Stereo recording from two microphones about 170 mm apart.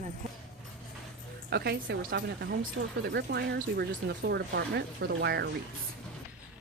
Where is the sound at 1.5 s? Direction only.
75° right (ahead or behind).